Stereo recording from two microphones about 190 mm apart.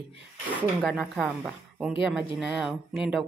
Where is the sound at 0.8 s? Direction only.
Centre (ahead or behind).